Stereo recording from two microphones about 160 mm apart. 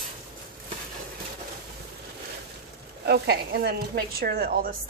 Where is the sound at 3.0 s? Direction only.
90° right; by 4.8 s 65° right (ahead or behind).